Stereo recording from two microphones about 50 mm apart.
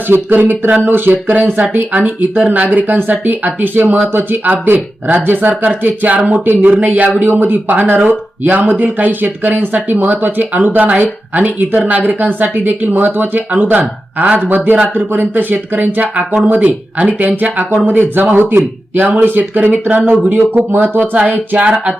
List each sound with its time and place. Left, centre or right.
0.1 s speech: right
7.3 s speech: right